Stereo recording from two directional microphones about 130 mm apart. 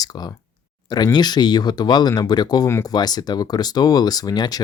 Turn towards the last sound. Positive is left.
turn(degrees=30)  # may be behind; listen again after turning